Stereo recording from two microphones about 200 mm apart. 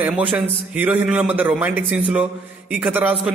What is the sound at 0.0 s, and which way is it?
A man's voice, 10° right (ahead or behind).